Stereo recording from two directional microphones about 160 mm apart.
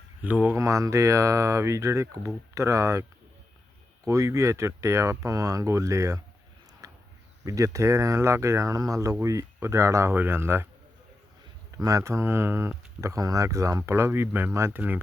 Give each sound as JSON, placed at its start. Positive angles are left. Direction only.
{"t": 0.2, "sound": "speech", "side_deg": -10}
{"t": 6.8, "sound": "a sound", "side_deg": -20}
{"t": 7.4, "sound": "speech", "side_deg": -20}
{"t": 11.8, "sound": "speech", "side_deg": -20}